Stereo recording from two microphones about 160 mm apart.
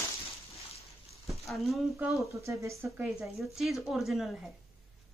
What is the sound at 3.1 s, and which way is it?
A woman's voice, centre (ahead or behind).